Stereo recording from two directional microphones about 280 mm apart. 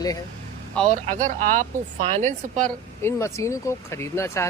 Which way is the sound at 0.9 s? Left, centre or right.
Right.